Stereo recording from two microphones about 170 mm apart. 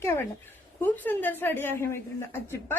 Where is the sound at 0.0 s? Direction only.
15° left (ahead or behind).